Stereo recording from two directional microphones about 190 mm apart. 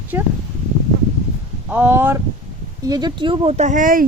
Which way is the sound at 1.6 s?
10° right (ahead or behind).